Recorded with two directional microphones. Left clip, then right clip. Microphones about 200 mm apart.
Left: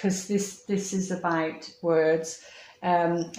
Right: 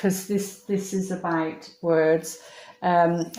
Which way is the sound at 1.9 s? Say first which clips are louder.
Right 2 dB; 35° right (ahead or behind).